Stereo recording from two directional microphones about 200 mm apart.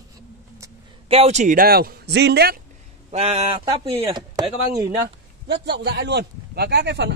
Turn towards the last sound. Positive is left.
turn(degrees=-60)  # may be behind; listen again after turning